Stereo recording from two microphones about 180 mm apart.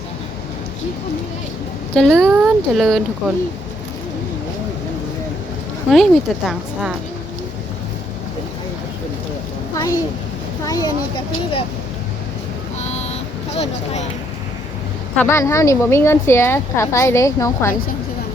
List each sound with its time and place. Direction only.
2.0 s speech: 5° left (ahead or behind)
5.9 s speech: centre (ahead or behind)
9.7 s a sound: 20° left (ahead or behind)
10.7 s speech: 20° left (ahead or behind)
12.8 s vehicle: 35° left (ahead or behind)
13.6 s speech: 40° left (ahead or behind)
15.1 s a woman's voice: 10° left (ahead or behind)